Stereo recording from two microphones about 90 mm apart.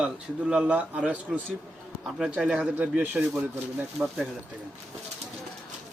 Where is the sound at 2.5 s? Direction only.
15° right (ahead or behind).